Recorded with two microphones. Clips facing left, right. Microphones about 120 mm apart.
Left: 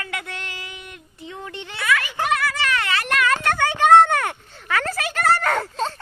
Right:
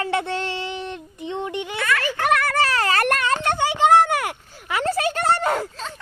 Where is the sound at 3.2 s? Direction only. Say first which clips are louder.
Left 1 dB; 25° right (ahead or behind).